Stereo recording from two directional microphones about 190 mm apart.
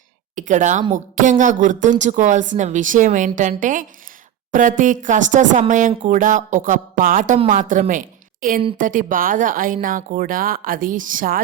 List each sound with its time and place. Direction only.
0.3 s a woman's voice: 40° right (ahead or behind)